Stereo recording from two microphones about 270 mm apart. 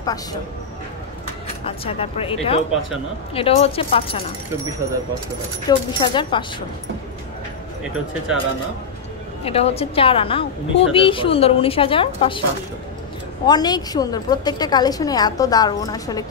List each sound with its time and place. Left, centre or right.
0.0 s a woman's voice: centre
1.6 s a woman's voice: left
5.7 s a woman's voice: centre
9.4 s a woman's voice: left
13.5 s a woman's voice: centre